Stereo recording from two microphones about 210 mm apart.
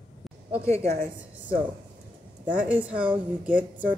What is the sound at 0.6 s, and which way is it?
Speech, 15° left (ahead or behind).